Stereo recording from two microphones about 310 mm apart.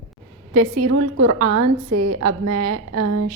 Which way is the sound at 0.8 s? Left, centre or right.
Right.